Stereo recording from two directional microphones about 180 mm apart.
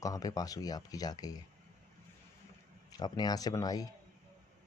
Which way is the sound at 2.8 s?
20° left (ahead or behind).